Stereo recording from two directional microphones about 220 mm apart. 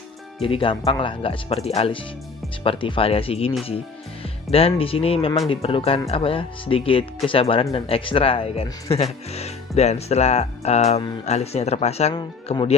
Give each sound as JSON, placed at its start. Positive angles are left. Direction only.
{"t": 0.4, "sound": "speech", "side_deg": 25}